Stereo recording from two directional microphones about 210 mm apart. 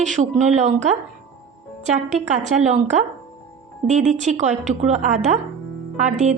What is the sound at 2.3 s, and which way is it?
A woman's voice, 35° right (ahead or behind).